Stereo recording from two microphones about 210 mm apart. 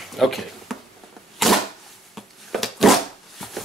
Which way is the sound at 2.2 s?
Centre (ahead or behind).